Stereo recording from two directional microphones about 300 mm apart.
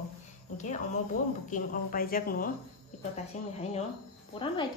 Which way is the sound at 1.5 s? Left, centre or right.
Left.